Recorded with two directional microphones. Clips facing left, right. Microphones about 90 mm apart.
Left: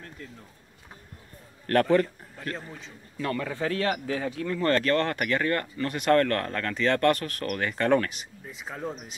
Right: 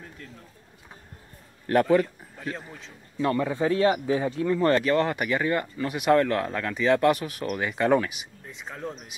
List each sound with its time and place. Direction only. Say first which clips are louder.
1.7 s a man's voice: right 1 dB; 5° right (ahead or behind)
3.2 s speech: right 5 dB; 20° right (ahead or behind)
8.5 s speech: left 1 dB; 5° left (ahead or behind)